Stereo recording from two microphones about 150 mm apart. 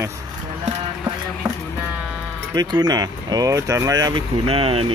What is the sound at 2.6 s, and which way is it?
Speech, 30° right (ahead or behind).